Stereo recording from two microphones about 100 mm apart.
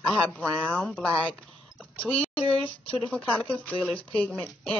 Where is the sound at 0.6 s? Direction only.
10° left (ahead or behind).